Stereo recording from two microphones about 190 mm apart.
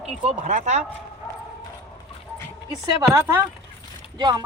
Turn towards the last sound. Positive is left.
turn(degrees=-20)  # may be behind; listen again after turning